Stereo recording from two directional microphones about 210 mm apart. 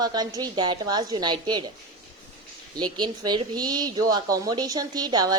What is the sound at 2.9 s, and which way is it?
A woman's voice, 20° right (ahead or behind).